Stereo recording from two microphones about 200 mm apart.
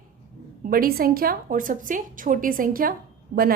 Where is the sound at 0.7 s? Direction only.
50° right (ahead or behind).